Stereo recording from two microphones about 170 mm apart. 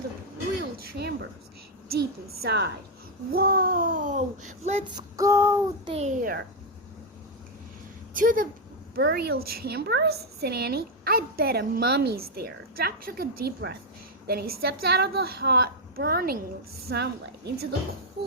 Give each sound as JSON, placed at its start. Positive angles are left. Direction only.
{"t": 0.6, "sound": "throat clearing", "side_deg": -65}
{"t": 2.0, "sound": "a woman's voice", "side_deg": -70}
{"t": 4.9, "sound": "child singing", "side_deg": -20}
{"t": 5.8, "sound": "a child's voice", "side_deg": -35}
{"t": 8.1, "sound": "a child's voice", "side_deg": -55}
{"t": 9.0, "sound": "a woman's voice", "side_deg": -80}
{"t": 14.3, "sound": "a woman's voice", "side_deg": -65}
{"t": 16.8, "sound": "a woman's voice", "side_deg": -75}